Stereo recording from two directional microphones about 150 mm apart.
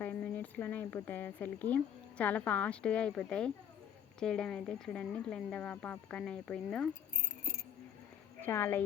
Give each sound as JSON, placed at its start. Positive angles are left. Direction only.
{"t": 0.0, "sound": "speech", "side_deg": 10}
{"t": 8.4, "sound": "a woman's voice", "side_deg": 15}